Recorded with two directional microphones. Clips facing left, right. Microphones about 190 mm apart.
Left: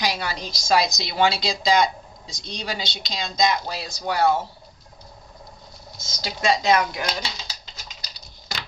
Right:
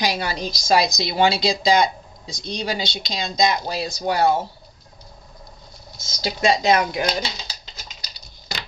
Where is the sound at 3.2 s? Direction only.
20° right (ahead or behind).